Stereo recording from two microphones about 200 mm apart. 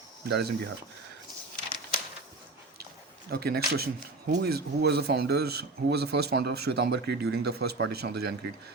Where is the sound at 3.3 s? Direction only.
50° right (ahead or behind).